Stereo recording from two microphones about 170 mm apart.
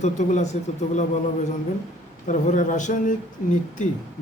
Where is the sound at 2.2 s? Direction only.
45° left (ahead or behind).